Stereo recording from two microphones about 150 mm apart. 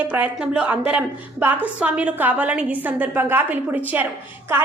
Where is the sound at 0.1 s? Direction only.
10° right (ahead or behind).